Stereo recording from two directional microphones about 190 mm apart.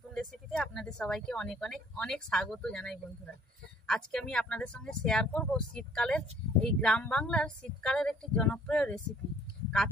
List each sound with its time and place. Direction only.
0.1 s speech: 5° left (ahead or behind)